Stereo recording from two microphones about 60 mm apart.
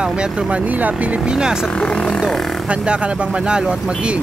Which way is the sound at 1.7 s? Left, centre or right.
Centre.